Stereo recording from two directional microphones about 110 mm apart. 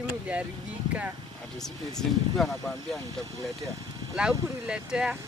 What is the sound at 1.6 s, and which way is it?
Speech, 5° left (ahead or behind).